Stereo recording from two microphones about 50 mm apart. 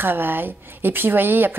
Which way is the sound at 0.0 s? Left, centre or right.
Right.